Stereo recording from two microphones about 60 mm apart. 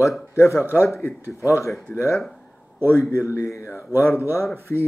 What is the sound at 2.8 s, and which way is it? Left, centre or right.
A man's voice, left.